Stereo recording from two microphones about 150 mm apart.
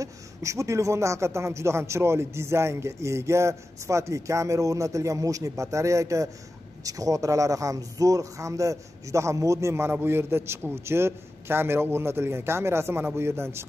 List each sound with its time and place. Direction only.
0.0 s a man's voice: 20° right (ahead or behind)